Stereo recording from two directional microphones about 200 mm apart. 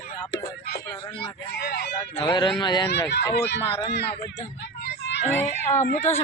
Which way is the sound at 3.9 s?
55° left (ahead or behind).